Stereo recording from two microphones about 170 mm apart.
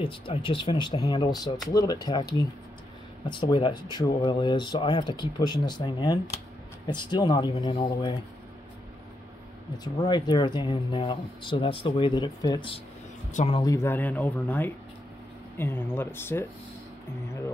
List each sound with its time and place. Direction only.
0.0 s speech: 30° left (ahead or behind)
9.9 s speech: 25° left (ahead or behind)
13.3 s speech: 45° left (ahead or behind)
13.6 s speech: 20° left (ahead or behind)